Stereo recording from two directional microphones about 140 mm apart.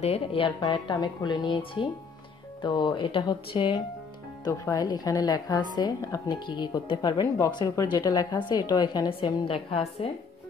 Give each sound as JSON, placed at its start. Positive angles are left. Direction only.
{"t": 0.0, "sound": "speech", "side_deg": 45}
{"t": 4.5, "sound": "a woman's voice", "side_deg": 25}